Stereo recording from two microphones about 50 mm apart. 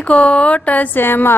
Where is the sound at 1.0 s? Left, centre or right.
Left.